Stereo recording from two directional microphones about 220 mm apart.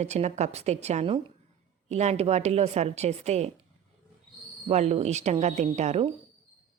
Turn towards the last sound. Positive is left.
turn(degrees=-30)  # may be behind; listen again after turning